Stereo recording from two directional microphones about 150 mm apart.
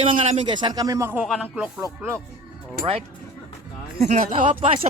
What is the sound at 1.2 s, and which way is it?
Speech, 5° right (ahead or behind).